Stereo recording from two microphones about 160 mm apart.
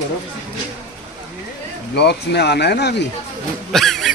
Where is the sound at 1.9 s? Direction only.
90° left.